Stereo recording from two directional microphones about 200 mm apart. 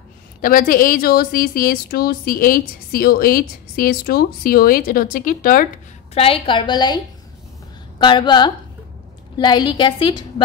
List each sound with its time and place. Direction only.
0.4 s a woman's voice: 45° left (ahead or behind)
6.1 s a woman's voice: 30° left (ahead or behind)
8.0 s a woman's voice: 20° left (ahead or behind)